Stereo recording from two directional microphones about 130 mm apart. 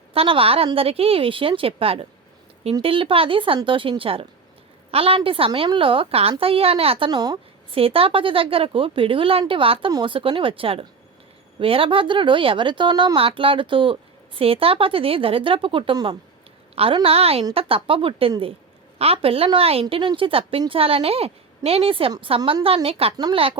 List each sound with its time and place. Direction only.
0.1 s speech: 45° right (ahead or behind)
7.1 s speech: 30° right (ahead or behind)
7.8 s speech: 45° right (ahead or behind)